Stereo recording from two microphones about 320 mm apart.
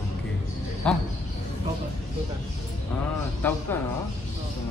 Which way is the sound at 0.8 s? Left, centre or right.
Centre.